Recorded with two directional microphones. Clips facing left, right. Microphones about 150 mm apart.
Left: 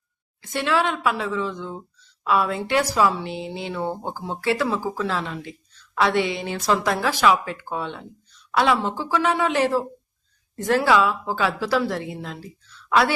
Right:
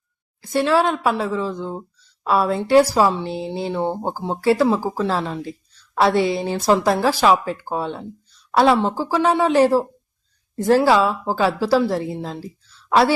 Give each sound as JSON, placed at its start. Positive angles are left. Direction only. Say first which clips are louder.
{"t": 0.4, "sound": "speech", "louder": "right 5 dB", "side_deg": -35}